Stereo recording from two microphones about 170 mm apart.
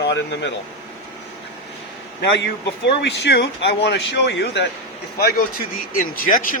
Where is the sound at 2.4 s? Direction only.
90° left.